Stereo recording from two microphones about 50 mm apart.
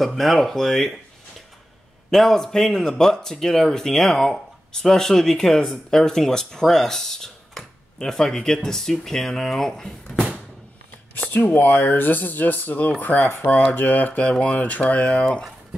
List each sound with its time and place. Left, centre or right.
0.0 s speech: centre
2.0 s speech: centre
11.1 s speech: left